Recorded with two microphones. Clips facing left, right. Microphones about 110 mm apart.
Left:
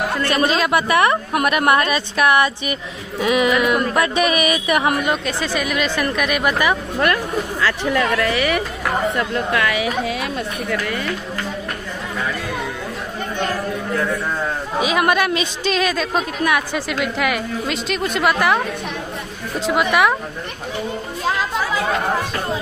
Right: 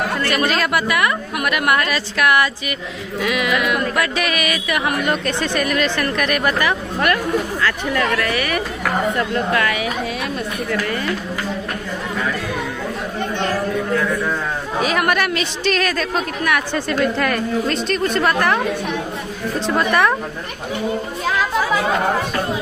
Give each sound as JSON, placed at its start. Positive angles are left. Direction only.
{"t": 0.2, "sound": "a woman's voice", "side_deg": 20}
{"t": 5.1, "sound": "a woman's voice", "side_deg": 5}
{"t": 8.2, "sound": "a woman's voice", "side_deg": 20}
{"t": 14.8, "sound": "a woman's voice", "side_deg": 15}
{"t": 19.7, "sound": "a woman's voice", "side_deg": 10}